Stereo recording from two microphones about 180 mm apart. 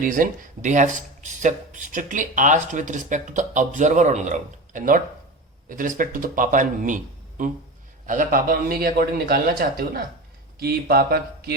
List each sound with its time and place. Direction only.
0.0 s a man's voice: 50° right (ahead or behind)